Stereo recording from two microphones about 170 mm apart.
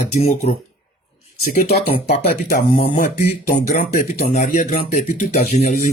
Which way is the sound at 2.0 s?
60° left (ahead or behind).